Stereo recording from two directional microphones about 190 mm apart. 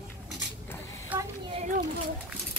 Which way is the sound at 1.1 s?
10° right (ahead or behind).